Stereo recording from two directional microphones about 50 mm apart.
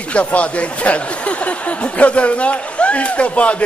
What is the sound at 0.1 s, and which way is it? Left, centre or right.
Speech, left.